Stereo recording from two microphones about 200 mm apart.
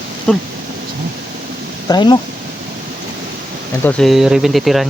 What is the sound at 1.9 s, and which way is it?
Speech, 20° left (ahead or behind).